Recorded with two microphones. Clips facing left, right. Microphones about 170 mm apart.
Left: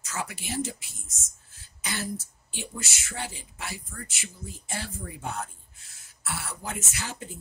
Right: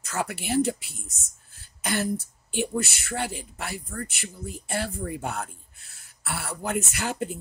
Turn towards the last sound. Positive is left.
turn(degrees=-60)  # may be behind; listen again after turning